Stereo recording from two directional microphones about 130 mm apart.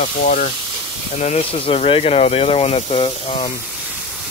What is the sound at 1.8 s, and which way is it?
Speech, 50° left (ahead or behind).